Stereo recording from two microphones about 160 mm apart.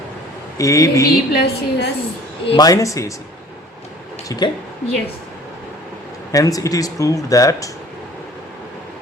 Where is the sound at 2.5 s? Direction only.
25° left (ahead or behind).